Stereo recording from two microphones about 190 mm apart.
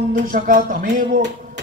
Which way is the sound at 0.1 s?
45° right (ahead or behind).